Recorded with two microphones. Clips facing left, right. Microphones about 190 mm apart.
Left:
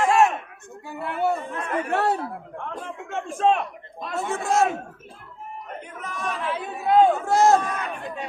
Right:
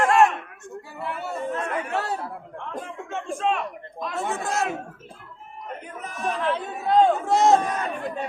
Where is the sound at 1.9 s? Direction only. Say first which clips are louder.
Left 5 dB; 60° left (ahead or behind).